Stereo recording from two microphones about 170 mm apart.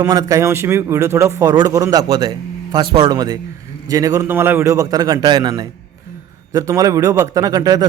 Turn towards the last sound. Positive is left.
turn(degrees=-20)  # may be behind; listen again after turning